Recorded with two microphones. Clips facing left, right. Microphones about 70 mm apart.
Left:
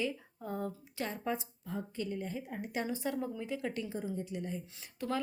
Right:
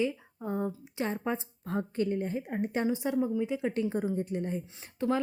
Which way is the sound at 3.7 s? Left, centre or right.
Right.